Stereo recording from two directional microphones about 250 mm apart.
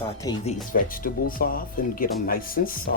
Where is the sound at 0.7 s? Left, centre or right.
Left.